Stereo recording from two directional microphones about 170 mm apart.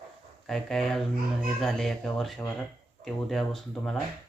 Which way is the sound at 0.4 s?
5° left (ahead or behind).